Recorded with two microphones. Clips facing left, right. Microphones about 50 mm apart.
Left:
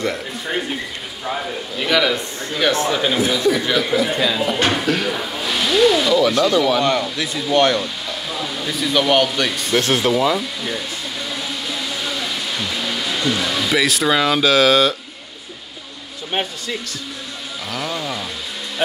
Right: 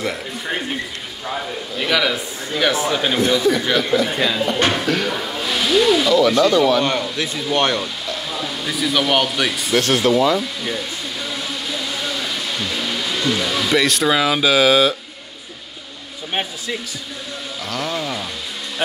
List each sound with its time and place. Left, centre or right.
0.0 s a sound: centre
1.8 s a man's voice: centre
6.8 s speech: right
8.3 s speech: centre
9.9 s a man's voice: centre
13.1 s a man's voice: centre
17.6 s a man's voice: centre